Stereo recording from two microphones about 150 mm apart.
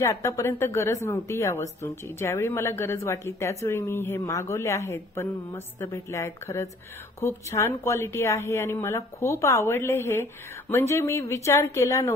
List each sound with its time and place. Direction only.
0.0 s a woman's voice: 20° left (ahead or behind)